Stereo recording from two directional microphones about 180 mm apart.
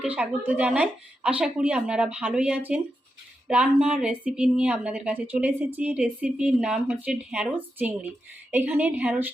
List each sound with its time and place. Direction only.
0.0 s a woman's voice: 5° right (ahead or behind)